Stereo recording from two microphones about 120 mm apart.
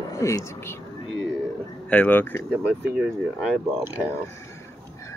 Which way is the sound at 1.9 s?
15° left (ahead or behind).